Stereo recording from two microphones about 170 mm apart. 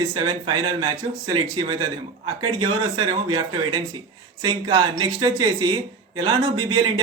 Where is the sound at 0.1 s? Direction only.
25° right (ahead or behind).